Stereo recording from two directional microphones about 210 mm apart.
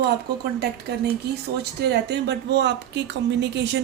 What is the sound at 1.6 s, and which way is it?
A woman's voice, 50° right (ahead or behind).